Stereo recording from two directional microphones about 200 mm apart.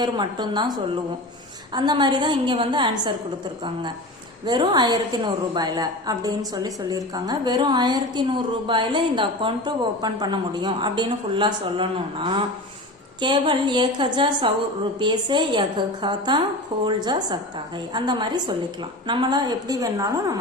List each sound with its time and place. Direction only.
0.0 s a woman's voice: 20° right (ahead or behind)
4.4 s a woman's voice: 20° right (ahead or behind)